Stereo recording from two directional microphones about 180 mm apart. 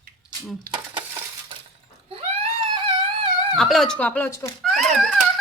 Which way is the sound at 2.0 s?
30° right (ahead or behind).